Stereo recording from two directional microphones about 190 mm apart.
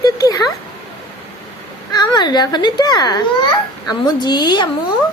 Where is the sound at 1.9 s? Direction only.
20° left (ahead or behind).